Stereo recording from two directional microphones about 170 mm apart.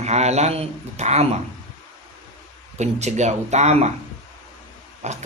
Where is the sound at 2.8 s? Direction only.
45° right (ahead or behind).